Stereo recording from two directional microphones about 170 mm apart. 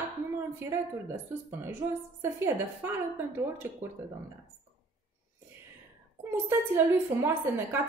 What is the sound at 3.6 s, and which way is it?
Speech, 15° right (ahead or behind).